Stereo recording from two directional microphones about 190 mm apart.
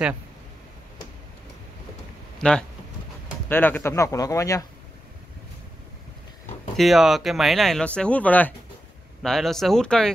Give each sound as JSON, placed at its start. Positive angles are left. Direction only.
{"t": 2.3, "sound": "a sound", "side_deg": 5}
{"t": 3.4, "sound": "speech", "side_deg": 10}
{"t": 6.8, "sound": "speech", "side_deg": 0}